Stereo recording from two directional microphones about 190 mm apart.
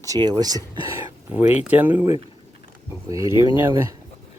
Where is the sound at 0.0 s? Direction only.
20° right (ahead or behind).